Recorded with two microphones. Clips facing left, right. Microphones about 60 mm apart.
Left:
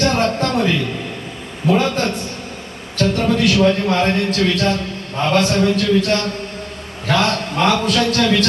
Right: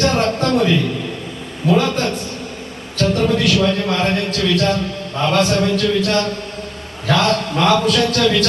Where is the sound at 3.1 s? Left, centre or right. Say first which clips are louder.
Even; left.